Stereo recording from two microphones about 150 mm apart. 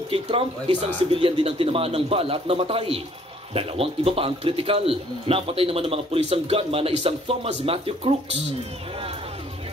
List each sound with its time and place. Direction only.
0.1 s speech: 40° right (ahead or behind)